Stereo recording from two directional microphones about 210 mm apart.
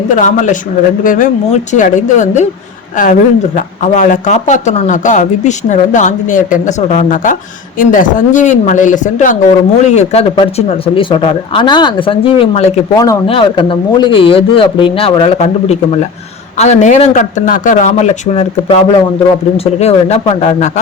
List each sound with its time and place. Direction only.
0.1 s a woman's voice: 35° left (ahead or behind)